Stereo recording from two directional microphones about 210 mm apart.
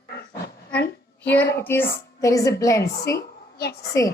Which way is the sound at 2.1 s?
15° left (ahead or behind).